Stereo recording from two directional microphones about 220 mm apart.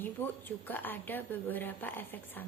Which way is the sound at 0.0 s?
10° left (ahead or behind).